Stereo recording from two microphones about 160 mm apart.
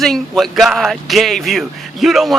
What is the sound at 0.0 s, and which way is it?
Speech, centre (ahead or behind).